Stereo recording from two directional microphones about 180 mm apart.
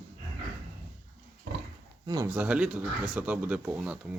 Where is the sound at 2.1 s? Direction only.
20° right (ahead or behind).